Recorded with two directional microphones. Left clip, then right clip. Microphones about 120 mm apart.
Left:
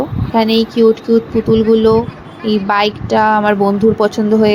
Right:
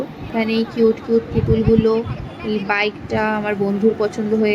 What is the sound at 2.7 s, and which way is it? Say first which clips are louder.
Speech: left 6 dB; 35° left (ahead or behind).